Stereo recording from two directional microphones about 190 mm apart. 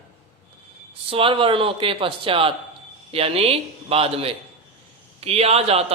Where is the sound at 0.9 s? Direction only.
30° right (ahead or behind).